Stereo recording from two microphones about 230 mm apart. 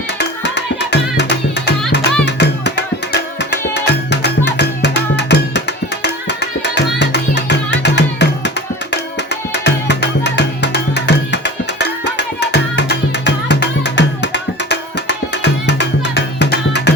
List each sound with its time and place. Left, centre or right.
0.2 s music: left